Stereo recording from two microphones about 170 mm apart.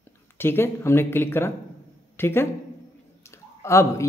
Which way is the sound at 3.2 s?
15° left (ahead or behind).